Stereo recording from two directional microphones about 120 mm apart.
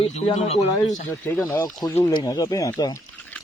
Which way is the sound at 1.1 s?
20° left (ahead or behind).